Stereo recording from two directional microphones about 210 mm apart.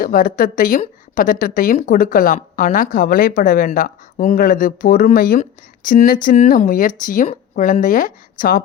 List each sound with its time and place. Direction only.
0.0 s speech: 40° left (ahead or behind)